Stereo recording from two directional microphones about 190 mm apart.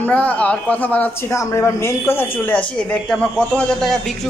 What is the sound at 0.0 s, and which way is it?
Speech, 5° left (ahead or behind).